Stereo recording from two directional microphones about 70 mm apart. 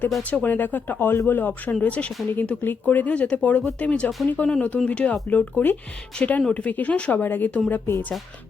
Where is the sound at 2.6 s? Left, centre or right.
Left.